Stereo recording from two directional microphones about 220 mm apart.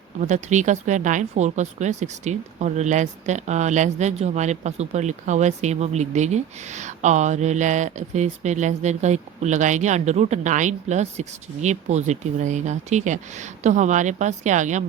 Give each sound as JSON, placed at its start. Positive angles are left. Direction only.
{"t": 0.2, "sound": "speech", "side_deg": -30}